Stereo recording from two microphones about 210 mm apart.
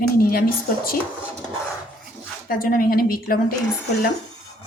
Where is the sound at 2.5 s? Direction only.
45° left (ahead or behind).